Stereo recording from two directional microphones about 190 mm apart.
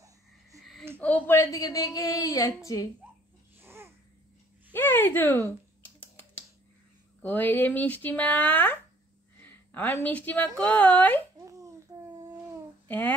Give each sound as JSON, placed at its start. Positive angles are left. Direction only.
{"t": 1.0, "sound": "a woman's voice", "side_deg": 10}
{"t": 3.5, "sound": "babbling", "side_deg": -10}
{"t": 4.7, "sound": "speech", "side_deg": 10}
{"t": 5.9, "sound": "typing", "side_deg": 10}
{"t": 7.2, "sound": "speech", "side_deg": 10}
{"t": 11.4, "sound": "babbling", "side_deg": -15}
{"t": 12.8, "sound": "child singing", "side_deg": 10}